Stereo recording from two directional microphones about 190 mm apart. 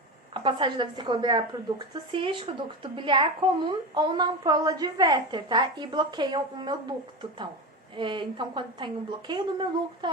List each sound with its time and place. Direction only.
0.4 s a woman's voice: 25° right (ahead or behind)
7.9 s a woman's voice: 25° right (ahead or behind)